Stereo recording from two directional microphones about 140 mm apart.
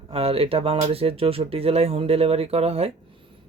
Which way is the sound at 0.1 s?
45° right (ahead or behind).